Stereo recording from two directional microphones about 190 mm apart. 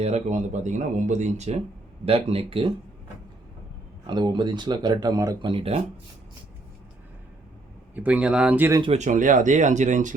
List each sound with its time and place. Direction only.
0.0 s speech: 35° right (ahead or behind)
4.0 s speech: 25° right (ahead or behind)
7.9 s speech: 5° right (ahead or behind)
8.8 s speech: 35° right (ahead or behind)